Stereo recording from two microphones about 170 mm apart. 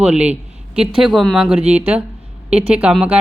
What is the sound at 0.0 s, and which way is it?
Speech, 5° right (ahead or behind).